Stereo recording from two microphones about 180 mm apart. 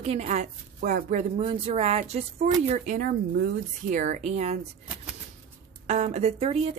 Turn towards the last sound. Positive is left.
turn(degrees=-35)  # may be behind; listen again after turning